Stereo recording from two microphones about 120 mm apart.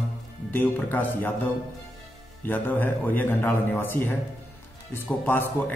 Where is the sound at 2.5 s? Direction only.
15° left (ahead or behind).